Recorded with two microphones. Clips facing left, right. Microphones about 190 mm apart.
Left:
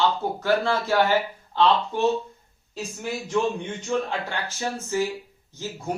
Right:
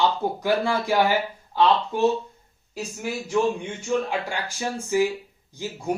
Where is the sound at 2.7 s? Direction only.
10° right (ahead or behind).